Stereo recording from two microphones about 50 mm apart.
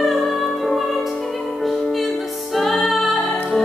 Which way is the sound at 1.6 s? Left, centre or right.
Centre.